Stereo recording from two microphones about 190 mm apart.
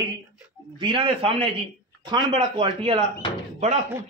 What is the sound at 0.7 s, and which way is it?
A man's voice, 25° right (ahead or behind).